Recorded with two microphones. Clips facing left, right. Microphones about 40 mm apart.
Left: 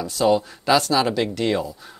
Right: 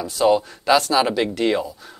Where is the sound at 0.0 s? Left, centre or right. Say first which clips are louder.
Right 1 dB; centre.